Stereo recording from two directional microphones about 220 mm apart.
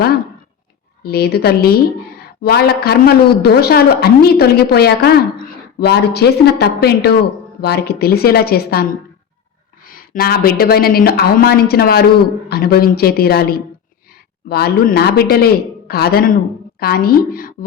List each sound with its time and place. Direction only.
1.0 s a woman's voice: 45° left (ahead or behind)